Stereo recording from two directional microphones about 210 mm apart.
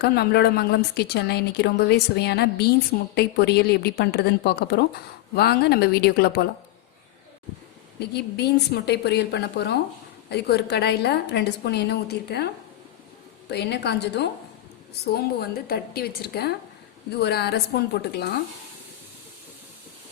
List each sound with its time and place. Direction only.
0.0 s speech: 50° left (ahead or behind)
7.9 s speech: 50° left (ahead or behind)
13.5 s speech: 50° left (ahead or behind)